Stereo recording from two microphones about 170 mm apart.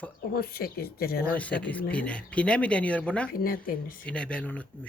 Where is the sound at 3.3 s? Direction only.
60° left (ahead or behind).